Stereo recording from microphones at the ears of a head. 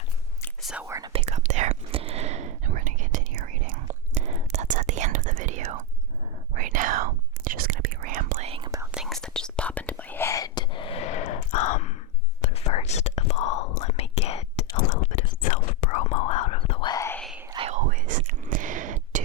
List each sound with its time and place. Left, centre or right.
1.0 s whispering: right
9.0 s whispering: centre
10.2 s sigh: left
12.4 s whispering: left
17.5 s whispering: right